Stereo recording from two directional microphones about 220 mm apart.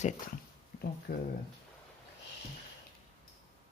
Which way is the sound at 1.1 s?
45° left (ahead or behind).